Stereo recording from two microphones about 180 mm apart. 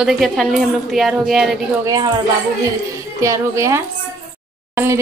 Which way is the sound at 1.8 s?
20° right (ahead or behind).